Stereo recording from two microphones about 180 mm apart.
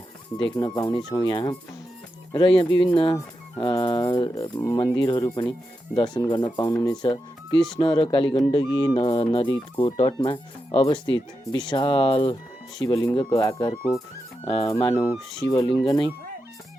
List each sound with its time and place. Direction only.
0.5 s speech: 25° left (ahead or behind)
15.1 s speech: centre (ahead or behind)
15.4 s speech: 25° left (ahead or behind)